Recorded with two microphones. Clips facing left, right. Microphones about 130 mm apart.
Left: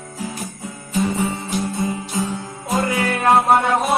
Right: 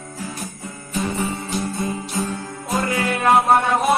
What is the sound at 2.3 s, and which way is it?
Music, 25° left (ahead or behind).